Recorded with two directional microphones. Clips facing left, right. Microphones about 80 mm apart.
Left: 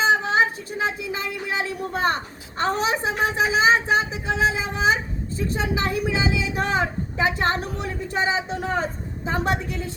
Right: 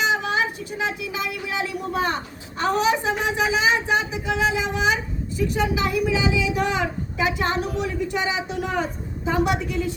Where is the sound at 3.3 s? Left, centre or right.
Left.